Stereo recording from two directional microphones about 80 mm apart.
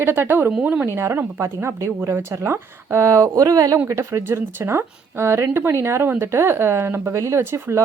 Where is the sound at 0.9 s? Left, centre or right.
Right.